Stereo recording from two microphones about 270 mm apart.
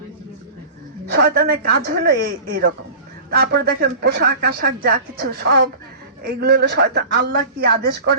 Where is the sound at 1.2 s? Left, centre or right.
Right.